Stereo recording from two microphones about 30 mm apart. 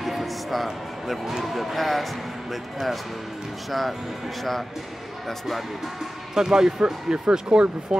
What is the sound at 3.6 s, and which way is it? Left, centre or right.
Speech, centre.